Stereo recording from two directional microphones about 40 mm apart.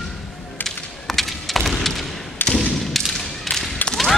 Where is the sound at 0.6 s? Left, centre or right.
Left.